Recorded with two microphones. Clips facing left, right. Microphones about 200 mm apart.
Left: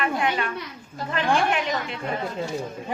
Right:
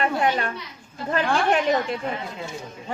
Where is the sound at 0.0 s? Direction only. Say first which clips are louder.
Right 2 dB; 40° right (ahead or behind).